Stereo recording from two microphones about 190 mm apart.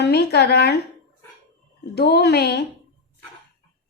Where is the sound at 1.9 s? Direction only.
60° left (ahead or behind).